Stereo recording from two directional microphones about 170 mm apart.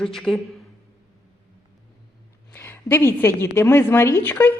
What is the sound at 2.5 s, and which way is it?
A woman's voice, 15° left (ahead or behind).